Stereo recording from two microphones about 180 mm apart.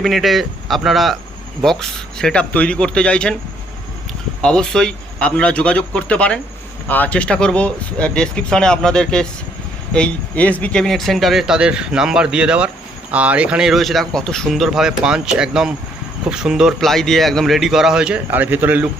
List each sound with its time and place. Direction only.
0.0 s speech: centre (ahead or behind)
4.4 s speech: 5° left (ahead or behind)